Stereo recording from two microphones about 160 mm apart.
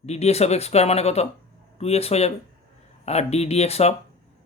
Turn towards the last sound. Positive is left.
turn(degrees=40)  # may be behind; listen again after turning